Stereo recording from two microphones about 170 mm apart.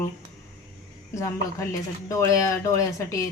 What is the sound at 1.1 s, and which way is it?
Speech, 20° left (ahead or behind).